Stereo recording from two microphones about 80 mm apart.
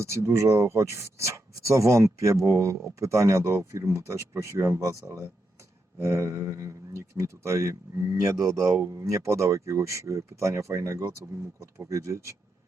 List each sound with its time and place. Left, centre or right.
0.0 s speech: right